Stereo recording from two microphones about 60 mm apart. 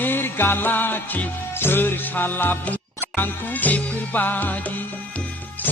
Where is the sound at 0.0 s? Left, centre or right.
Left.